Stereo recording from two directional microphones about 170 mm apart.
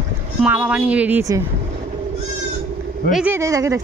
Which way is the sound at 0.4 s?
10° right (ahead or behind).